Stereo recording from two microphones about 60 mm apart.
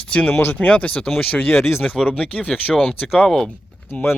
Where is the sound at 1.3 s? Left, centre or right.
Left.